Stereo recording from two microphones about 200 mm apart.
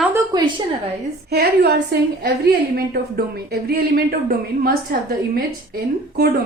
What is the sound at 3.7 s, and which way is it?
A woman's voice, 50° right (ahead or behind).